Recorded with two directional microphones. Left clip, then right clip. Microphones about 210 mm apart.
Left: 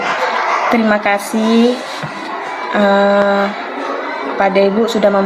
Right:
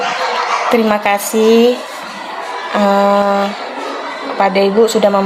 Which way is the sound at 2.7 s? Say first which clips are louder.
Even; 30° right (ahead or behind).